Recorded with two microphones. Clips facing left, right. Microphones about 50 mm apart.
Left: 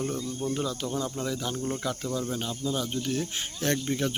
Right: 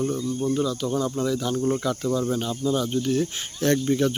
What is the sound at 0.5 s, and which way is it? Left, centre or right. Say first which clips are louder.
Speech: right 6 dB; left.